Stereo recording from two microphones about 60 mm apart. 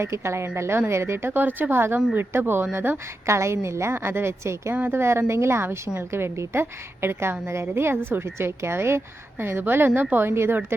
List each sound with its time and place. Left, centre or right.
0.0 s a woman's voice: right
3.2 s a woman's voice: right